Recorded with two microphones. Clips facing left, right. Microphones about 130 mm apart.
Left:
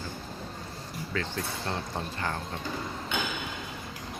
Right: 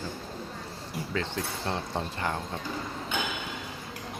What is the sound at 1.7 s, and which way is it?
Speech, 20° right (ahead or behind).